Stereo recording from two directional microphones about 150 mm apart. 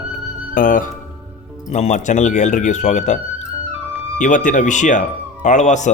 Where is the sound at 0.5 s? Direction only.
65° left (ahead or behind).